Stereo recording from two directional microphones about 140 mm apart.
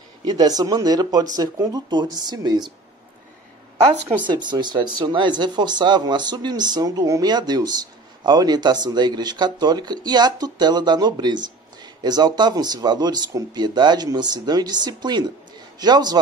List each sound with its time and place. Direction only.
0.2 s speech: 30° right (ahead or behind)
4.3 s speech: 30° right (ahead or behind)